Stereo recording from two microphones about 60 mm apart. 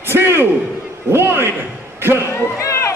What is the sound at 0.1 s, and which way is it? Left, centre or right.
A man's voice, right.